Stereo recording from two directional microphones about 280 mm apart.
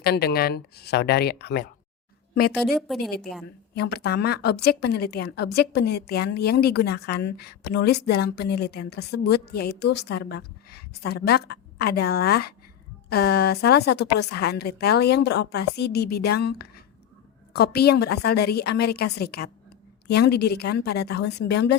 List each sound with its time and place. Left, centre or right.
0.0 s a woman's voice: left
2.7 s a woman's voice: centre
3.4 s a woman's voice: left